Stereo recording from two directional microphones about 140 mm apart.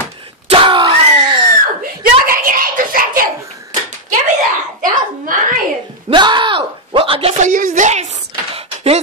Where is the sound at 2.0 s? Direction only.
90° right.